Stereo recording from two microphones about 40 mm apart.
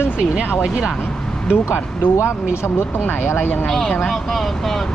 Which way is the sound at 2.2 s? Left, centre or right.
Left.